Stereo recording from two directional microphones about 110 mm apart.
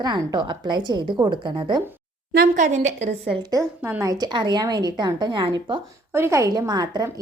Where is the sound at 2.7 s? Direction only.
90° right.